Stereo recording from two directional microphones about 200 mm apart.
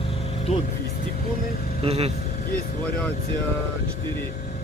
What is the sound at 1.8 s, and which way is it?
Speech, 30° right (ahead or behind).